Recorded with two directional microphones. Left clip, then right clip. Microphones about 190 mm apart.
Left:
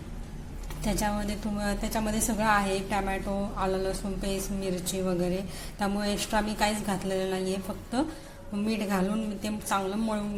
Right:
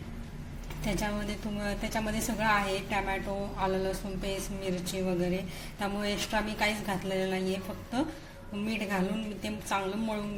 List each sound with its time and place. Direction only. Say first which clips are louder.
0.9 s a woman's voice: left 3 dB; centre (ahead or behind)